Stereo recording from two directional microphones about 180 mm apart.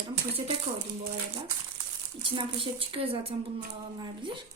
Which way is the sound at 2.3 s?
25° right (ahead or behind).